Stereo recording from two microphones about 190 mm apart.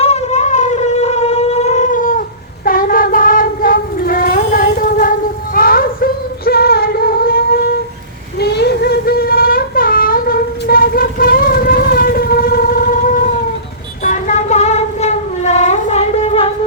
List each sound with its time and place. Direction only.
0.0 s shofar: 35° left (ahead or behind)
2.6 s child singing: 45° left (ahead or behind)
5.5 s music: 50° left (ahead or behind)
8.4 s a sound: 60° left (ahead or behind); by 13.3 s 45° left (ahead or behind)
14.0 s child singing: 40° left (ahead or behind)